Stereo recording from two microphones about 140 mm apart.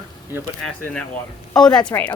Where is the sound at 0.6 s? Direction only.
5° left (ahead or behind).